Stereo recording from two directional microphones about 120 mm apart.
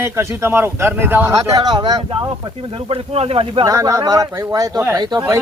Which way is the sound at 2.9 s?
50° right (ahead or behind).